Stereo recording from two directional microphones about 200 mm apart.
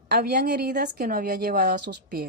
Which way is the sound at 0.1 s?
50° right (ahead or behind).